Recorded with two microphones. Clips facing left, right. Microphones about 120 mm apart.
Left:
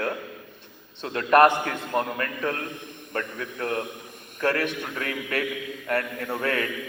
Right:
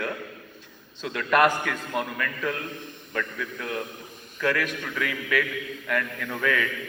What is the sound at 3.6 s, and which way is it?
Speech, 60° left (ahead or behind).